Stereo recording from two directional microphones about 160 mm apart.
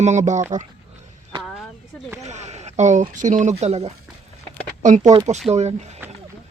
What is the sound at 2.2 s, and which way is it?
Speech, 45° right (ahead or behind).